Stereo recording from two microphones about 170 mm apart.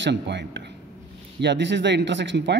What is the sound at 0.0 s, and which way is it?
Speech, 90° right.